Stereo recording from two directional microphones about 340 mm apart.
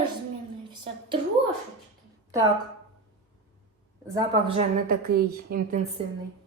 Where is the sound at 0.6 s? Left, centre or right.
Centre.